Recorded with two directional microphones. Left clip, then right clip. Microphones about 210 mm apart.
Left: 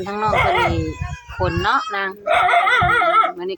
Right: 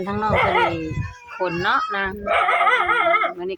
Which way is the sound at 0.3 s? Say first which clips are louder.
Left 1 dB; 55° left (ahead or behind).